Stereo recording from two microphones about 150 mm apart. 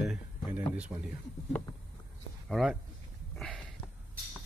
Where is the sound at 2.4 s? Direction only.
Centre (ahead or behind).